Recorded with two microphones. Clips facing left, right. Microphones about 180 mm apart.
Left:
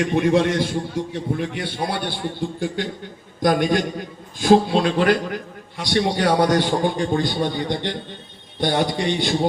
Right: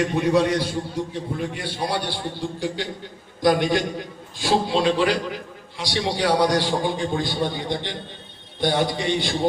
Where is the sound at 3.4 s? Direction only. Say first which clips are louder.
Left 1 dB; 50° left (ahead or behind).